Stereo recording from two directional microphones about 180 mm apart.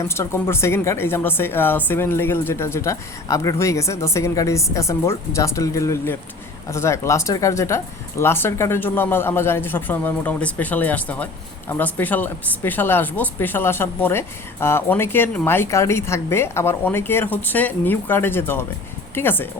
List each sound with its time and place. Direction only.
0.1 s speech: 15° left (ahead or behind)